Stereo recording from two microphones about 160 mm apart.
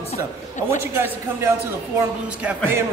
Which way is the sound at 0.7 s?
15° right (ahead or behind).